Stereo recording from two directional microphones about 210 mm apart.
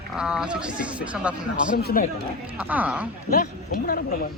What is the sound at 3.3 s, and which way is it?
Speech, 40° left (ahead or behind).